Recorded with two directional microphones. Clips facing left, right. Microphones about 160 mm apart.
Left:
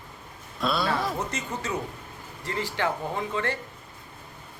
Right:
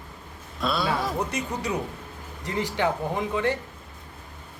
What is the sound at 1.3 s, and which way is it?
Speech, 15° right (ahead or behind).